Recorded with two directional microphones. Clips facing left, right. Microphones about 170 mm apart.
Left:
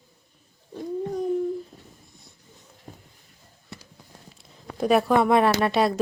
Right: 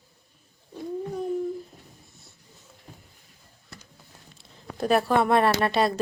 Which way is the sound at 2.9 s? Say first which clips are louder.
Left 4 dB; 45° left (ahead or behind).